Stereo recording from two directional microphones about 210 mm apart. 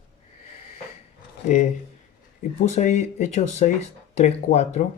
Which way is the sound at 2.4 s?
35° left (ahead or behind).